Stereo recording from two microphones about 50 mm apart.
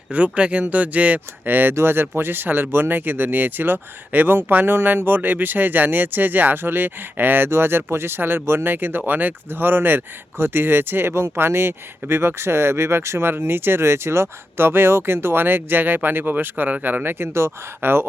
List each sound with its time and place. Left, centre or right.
0.1 s speech: right
1.5 s speech: right